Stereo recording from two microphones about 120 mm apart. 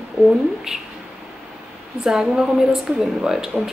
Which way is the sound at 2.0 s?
5° right (ahead or behind).